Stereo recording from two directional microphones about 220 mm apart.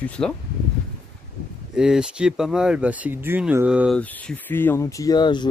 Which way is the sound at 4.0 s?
5° left (ahead or behind).